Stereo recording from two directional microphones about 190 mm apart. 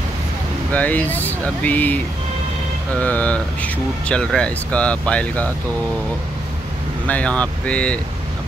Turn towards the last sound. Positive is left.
turn(degrees=5)  # may be behind; listen again after turning